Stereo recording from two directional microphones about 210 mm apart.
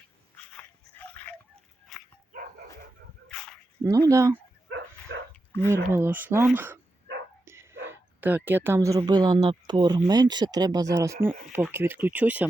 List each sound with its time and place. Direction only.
0.5 s dog: 5° left (ahead or behind)
3.2 s dog: 5° left (ahead or behind)
4.1 s speech: 15° right (ahead or behind)
4.7 s dog: 65° right (ahead or behind)
5.5 s a sound: 15° left (ahead or behind)
5.7 s speech: 10° right (ahead or behind)
7.4 s dog: 10° right (ahead or behind)
7.9 s speech: 10° right (ahead or behind)